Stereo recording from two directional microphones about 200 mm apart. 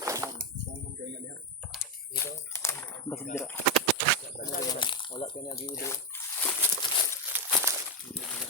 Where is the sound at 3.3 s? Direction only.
15° left (ahead or behind).